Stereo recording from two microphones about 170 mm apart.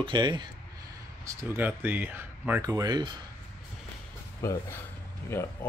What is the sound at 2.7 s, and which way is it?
Speech, 25° right (ahead or behind).